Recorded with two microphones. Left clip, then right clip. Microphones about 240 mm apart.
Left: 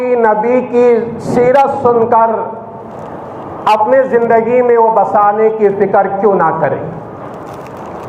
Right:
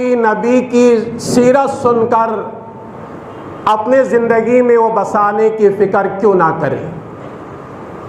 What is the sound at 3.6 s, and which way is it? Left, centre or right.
A man's voice, right.